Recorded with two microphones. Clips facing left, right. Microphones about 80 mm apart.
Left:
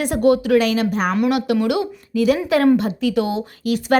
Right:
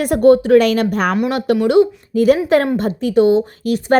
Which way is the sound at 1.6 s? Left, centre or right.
Right.